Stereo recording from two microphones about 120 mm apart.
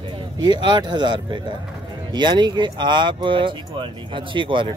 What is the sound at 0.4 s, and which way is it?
Speech, 40° right (ahead or behind).